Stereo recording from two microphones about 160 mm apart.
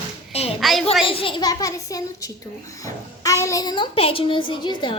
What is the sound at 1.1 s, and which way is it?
A child's voice, 35° left (ahead or behind).